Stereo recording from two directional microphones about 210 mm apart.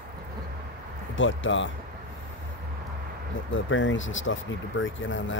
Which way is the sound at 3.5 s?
65° left (ahead or behind).